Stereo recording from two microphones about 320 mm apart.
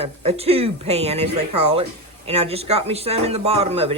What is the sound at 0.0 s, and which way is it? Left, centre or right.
Speech, centre.